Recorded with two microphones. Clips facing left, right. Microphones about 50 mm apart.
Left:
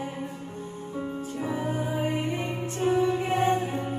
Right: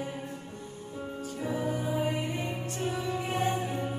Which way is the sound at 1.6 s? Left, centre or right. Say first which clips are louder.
Even; left.